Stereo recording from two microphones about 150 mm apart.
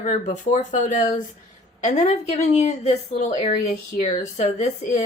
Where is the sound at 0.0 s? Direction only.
55° left (ahead or behind).